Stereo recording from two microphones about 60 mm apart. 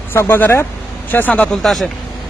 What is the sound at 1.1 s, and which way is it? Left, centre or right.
Speech, left.